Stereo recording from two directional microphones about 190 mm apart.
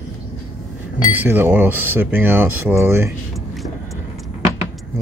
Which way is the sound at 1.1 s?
10° right (ahead or behind).